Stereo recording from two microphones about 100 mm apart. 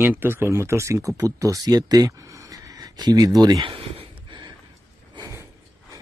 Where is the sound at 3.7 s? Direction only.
60° right (ahead or behind).